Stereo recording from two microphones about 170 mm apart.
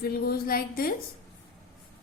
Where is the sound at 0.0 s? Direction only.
60° left (ahead or behind).